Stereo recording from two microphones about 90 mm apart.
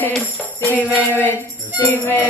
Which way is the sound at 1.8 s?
20° left (ahead or behind).